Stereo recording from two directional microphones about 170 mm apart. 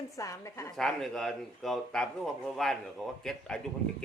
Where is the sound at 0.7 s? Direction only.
Centre (ahead or behind).